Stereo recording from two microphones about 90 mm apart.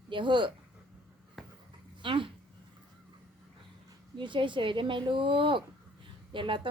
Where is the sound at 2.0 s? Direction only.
65° right (ahead or behind).